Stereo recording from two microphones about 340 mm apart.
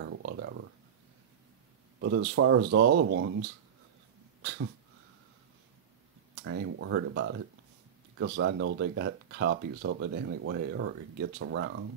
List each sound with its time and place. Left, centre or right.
0.0 s a sound: right
2.0 s speech: right
4.4 s dog: right
6.4 s speech: right